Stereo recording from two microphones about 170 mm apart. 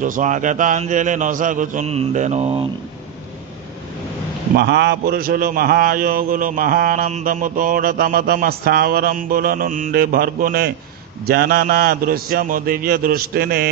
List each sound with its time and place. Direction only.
0.0 s speech: 50° right (ahead or behind)
4.6 s a man's voice: 85° right
5.0 s a man's voice: 60° right (ahead or behind)